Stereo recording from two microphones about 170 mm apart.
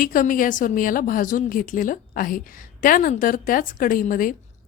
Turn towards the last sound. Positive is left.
turn(degrees=55)  # may be behind; listen again after turning